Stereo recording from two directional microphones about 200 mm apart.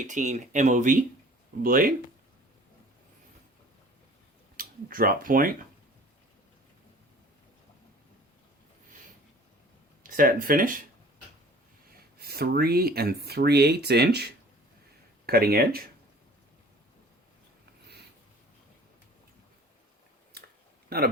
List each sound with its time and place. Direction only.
0.1 s speech: 40° right (ahead or behind)
4.5 s speech: 45° right (ahead or behind)
10.0 s speech: 45° right (ahead or behind)
12.2 s speech: 50° right (ahead or behind)
15.3 s speech: 50° right (ahead or behind)
20.9 s speech: 50° right (ahead or behind)